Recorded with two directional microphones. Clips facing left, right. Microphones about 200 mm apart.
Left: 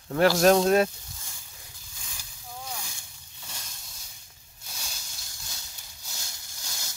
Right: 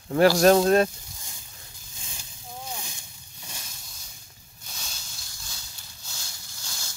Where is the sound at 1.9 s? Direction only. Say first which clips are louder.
Right 3 dB; 25° right (ahead or behind).